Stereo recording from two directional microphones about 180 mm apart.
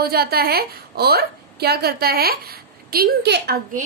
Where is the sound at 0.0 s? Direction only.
60° right (ahead or behind).